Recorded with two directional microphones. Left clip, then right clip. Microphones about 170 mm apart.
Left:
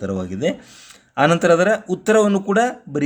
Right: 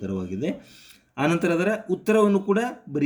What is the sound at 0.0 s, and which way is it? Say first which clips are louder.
Speech: left 7 dB; 30° left (ahead or behind).